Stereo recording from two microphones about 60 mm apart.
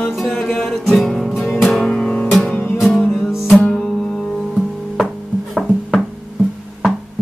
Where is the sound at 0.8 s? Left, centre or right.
Centre.